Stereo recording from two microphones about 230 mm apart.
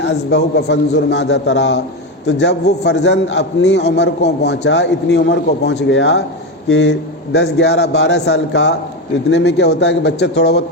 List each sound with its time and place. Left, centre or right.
0.0 s a man's voice: left